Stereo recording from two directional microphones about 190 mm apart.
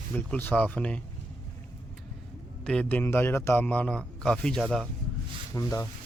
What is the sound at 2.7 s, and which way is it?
A man's voice, 5° left (ahead or behind).